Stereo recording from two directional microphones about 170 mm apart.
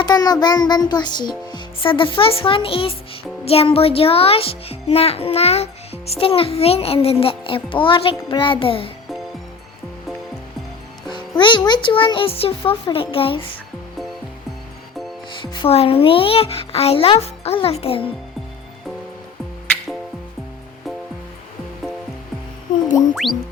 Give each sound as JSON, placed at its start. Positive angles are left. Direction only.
{"t": 0.0, "sound": "music", "side_deg": 25}
{"t": 3.4, "sound": "a child's voice", "side_deg": 35}
{"t": 11.1, "sound": "music", "side_deg": 30}
{"t": 12.9, "sound": "a child's voice", "side_deg": 35}
{"t": 15.4, "sound": "a child's voice", "side_deg": 30}
{"t": 23.0, "sound": "music", "side_deg": 0}